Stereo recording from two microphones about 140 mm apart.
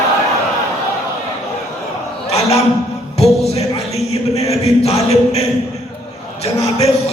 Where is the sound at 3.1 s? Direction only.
50° left (ahead or behind).